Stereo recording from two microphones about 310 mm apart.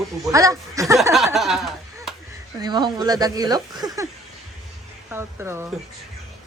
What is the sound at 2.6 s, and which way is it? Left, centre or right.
Speech, centre.